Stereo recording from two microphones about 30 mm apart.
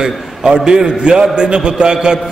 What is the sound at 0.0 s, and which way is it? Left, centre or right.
A man's voice, right.